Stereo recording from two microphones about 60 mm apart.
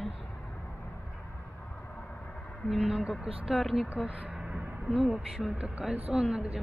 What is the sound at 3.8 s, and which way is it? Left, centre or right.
Speech, right.